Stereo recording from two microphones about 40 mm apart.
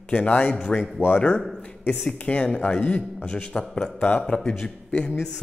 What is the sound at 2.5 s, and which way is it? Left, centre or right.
A man's voice, left.